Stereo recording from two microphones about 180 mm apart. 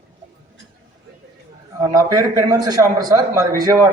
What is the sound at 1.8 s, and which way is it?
Speech, 20° right (ahead or behind).